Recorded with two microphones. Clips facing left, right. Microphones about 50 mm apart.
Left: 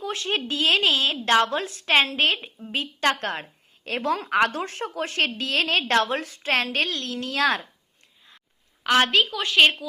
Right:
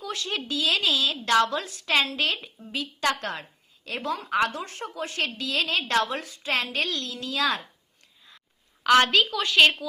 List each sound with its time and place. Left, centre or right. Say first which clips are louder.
0.0 s a woman's voice: left 4 dB; left
9.1 s a woman's voice: left 1 dB; left